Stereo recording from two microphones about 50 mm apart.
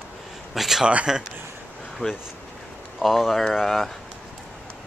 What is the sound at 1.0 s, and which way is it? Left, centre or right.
Speech, centre.